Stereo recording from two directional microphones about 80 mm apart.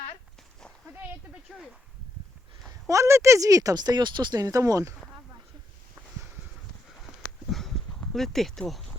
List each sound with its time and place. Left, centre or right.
1.5 s speech: centre
2.8 s speech: right
4.4 s speech: right
7.5 s dog: centre
8.1 s speech: centre